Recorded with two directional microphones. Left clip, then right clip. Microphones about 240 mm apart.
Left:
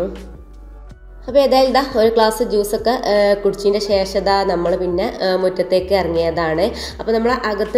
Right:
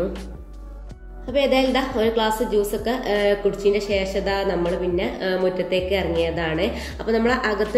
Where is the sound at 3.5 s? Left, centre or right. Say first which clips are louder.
Left 4 dB; centre.